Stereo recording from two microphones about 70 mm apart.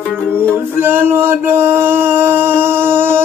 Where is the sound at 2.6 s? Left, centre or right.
Right.